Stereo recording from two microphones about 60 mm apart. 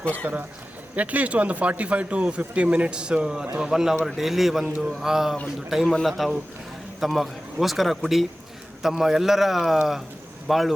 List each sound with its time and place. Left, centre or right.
0.0 s a man's voice: left
0.9 s a man's voice: right; by 10.8 s centre